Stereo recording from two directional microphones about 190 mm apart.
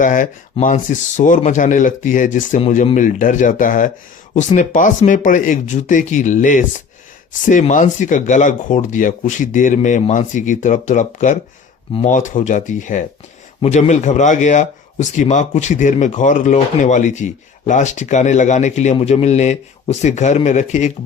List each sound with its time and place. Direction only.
0.0 s a man's voice: 45° left (ahead or behind)